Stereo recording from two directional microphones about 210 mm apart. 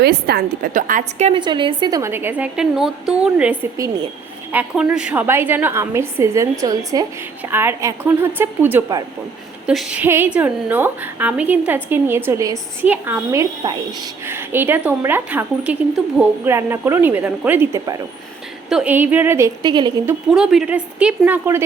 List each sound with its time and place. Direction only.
0.0 s a woman's voice: 50° right (ahead or behind)
1.3 s a woman's voice: 20° right (ahead or behind)
20.3 s a woman's voice: 5° right (ahead or behind)